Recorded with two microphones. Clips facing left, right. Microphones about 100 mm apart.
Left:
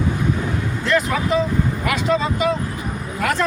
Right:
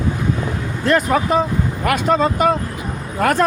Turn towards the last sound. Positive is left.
turn(degrees=-45)  # may be behind; listen again after turning